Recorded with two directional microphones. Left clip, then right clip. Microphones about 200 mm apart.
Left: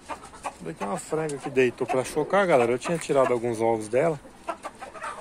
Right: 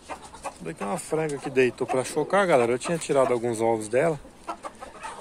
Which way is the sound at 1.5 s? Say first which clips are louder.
Even; centre (ahead or behind).